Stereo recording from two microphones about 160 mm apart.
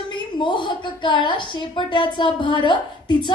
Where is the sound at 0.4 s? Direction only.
30° left (ahead or behind).